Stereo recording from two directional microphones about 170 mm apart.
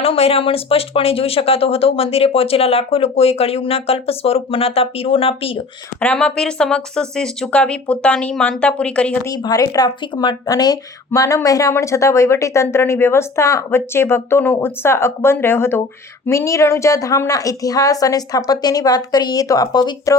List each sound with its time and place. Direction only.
0.0 s speech: 35° left (ahead or behind)
6.0 s speech: 5° left (ahead or behind)
9.2 s a woman's voice: 20° left (ahead or behind)